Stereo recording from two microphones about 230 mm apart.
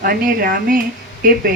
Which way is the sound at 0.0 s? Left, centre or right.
Right.